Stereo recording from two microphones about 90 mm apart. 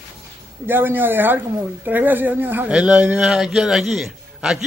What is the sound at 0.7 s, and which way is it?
Speech, 25° right (ahead or behind).